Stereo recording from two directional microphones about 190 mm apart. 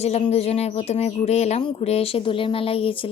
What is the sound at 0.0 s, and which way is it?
Speech, 35° left (ahead or behind).